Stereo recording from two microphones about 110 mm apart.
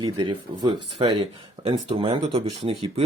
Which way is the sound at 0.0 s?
45° right (ahead or behind).